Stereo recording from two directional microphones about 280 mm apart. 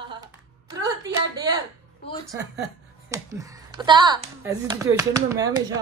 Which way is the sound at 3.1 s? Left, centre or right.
Centre.